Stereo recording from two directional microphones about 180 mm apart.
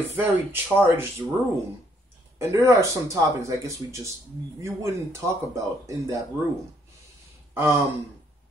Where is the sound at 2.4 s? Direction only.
15° right (ahead or behind).